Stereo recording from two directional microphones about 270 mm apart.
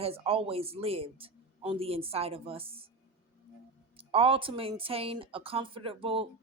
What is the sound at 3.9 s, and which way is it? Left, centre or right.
Speech, right.